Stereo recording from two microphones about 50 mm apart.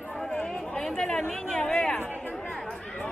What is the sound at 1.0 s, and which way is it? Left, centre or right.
Speech, centre.